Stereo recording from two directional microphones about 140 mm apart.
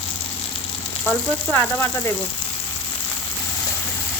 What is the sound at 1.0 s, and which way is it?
Speech, 10° left (ahead or behind).